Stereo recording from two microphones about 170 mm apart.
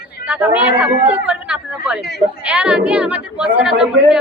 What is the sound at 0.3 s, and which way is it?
A woman's voice, 10° right (ahead or behind).